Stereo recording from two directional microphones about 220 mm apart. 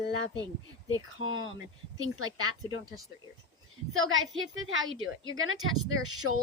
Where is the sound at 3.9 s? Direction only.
65° right (ahead or behind).